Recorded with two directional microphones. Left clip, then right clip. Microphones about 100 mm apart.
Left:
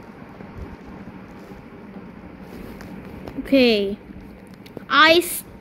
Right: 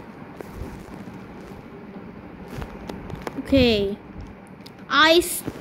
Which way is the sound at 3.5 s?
5° left (ahead or behind).